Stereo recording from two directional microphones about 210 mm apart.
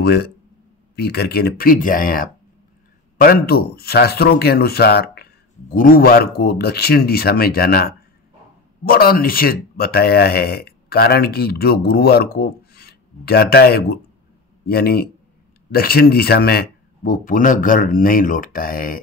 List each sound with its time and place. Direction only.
0.0 s a man's voice: 50° left (ahead or behind)